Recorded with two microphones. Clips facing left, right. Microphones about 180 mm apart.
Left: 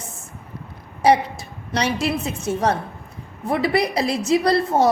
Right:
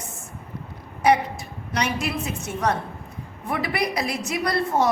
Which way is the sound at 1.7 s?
30° left (ahead or behind).